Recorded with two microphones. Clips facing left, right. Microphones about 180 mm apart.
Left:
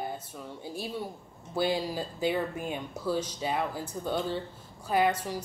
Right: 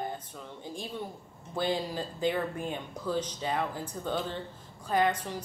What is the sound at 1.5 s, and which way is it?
Speech, 10° left (ahead or behind).